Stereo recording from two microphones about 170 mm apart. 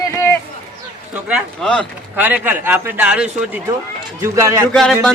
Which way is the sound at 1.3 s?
Centre (ahead or behind).